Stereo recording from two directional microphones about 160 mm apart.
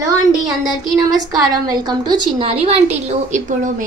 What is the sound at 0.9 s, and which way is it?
A woman's voice, 25° right (ahead or behind).